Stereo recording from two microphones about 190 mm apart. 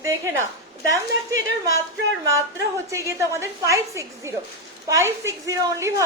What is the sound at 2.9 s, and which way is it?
A woman's voice, 15° right (ahead or behind).